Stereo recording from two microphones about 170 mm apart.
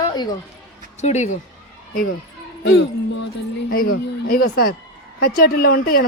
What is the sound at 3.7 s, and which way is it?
Speech, 60° left (ahead or behind).